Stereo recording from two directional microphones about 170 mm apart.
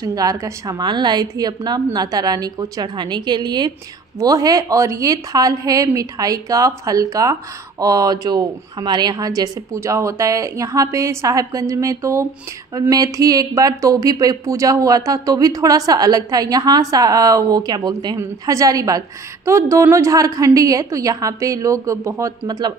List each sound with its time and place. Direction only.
0.0 s speech: 20° right (ahead or behind)